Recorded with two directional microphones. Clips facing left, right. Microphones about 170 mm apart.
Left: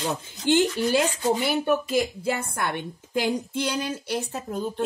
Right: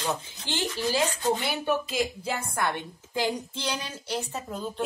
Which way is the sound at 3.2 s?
55° left (ahead or behind).